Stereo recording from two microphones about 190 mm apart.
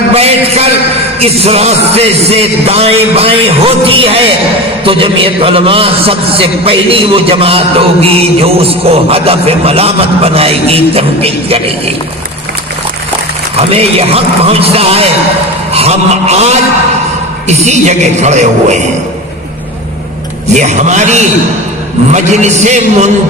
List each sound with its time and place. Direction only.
0.1 s music: 35° right (ahead or behind)
4.8 s a man's voice: 30° right (ahead or behind)
13.6 s music: 30° right (ahead or behind)
20.5 s music: 40° right (ahead or behind)